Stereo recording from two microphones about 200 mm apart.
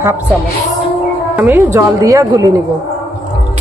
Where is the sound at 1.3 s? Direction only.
15° right (ahead or behind).